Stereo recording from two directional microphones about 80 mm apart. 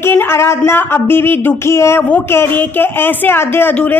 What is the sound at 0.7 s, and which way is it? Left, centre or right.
A woman's voice, left.